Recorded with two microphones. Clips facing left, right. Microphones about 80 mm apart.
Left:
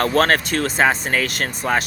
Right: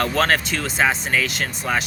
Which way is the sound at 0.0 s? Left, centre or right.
Left.